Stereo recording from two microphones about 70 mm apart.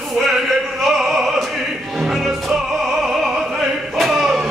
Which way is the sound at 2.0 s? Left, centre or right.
Centre.